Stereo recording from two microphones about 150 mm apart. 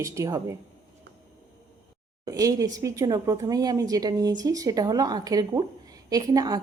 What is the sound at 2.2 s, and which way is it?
Speech, 25° right (ahead or behind).